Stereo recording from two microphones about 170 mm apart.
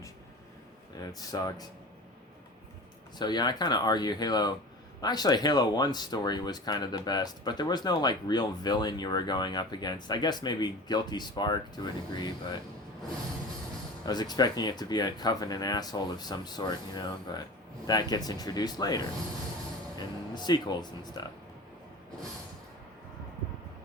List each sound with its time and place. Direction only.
1.2 s speech: 20° left (ahead or behind)
3.2 s speech: 25° left (ahead or behind)
14.0 s speech: 25° left (ahead or behind)
20.3 s speech: 25° left (ahead or behind)